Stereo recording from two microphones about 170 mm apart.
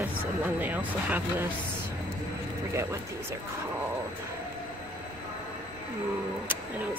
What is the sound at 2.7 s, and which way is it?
Speech, 15° right (ahead or behind).